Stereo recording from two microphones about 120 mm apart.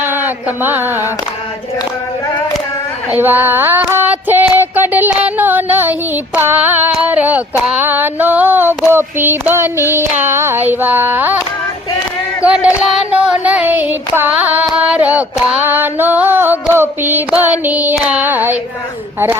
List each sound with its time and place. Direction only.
0.0 s a sound: 15° right (ahead or behind)
3.1 s child singing: 15° right (ahead or behind)
6.9 s female singing: 10° right (ahead or behind)
8.9 s child singing: 20° right (ahead or behind)
12.5 s child singing: 5° right (ahead or behind)